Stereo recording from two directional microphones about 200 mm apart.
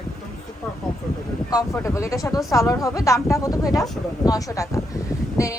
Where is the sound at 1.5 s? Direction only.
15° left (ahead or behind).